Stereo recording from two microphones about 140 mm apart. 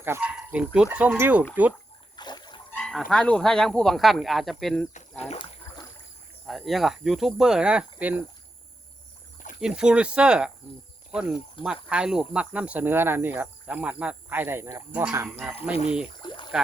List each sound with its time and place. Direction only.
0.0 s speech: 15° right (ahead or behind)
2.1 s splash: 30° left (ahead or behind)
2.7 s speech: 5° left (ahead or behind)
5.7 s boat: 20° left (ahead or behind)
6.4 s speech: centre (ahead or behind)
9.6 s speech: 5° right (ahead or behind)
11.6 s speech: 10° right (ahead or behind)
15.7 s speech: 45° left (ahead or behind)
16.2 s a sound: 30° left (ahead or behind)